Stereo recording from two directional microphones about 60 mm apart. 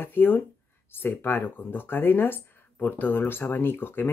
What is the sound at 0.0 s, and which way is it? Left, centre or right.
Speech, left.